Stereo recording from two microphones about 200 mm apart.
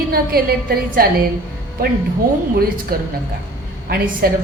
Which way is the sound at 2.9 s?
45° right (ahead or behind).